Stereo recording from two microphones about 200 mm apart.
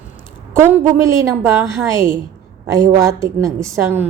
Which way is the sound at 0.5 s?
10° right (ahead or behind).